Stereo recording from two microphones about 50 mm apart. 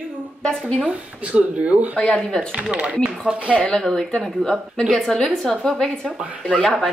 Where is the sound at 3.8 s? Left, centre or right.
Centre.